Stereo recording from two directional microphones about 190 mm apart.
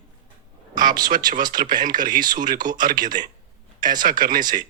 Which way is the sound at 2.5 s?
20° right (ahead or behind).